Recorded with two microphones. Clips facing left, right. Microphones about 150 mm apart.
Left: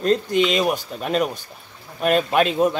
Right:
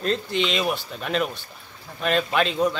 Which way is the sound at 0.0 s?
40° left (ahead or behind).